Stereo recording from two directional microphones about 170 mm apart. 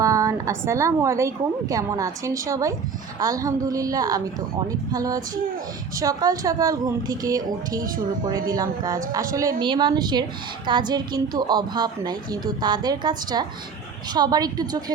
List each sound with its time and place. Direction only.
0.0 s a woman's voice: 20° right (ahead or behind)